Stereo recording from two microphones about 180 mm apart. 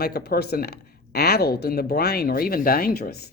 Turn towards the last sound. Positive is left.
turn(degrees=55)  # may be behind; listen again after turning